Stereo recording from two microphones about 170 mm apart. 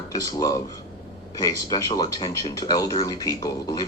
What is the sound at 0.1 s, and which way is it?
Speech, 20° left (ahead or behind).